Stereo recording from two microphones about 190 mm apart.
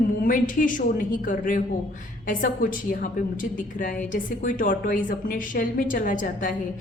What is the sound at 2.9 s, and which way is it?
A woman's voice, 45° left (ahead or behind).